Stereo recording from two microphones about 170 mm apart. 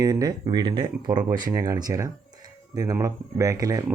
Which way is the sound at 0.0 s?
20° right (ahead or behind).